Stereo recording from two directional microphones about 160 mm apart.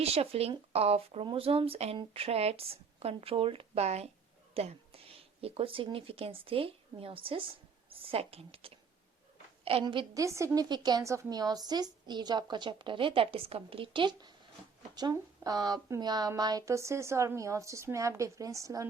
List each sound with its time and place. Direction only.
0.0 s speech: 40° right (ahead or behind)
10.2 s a woman's voice: 20° right (ahead or behind)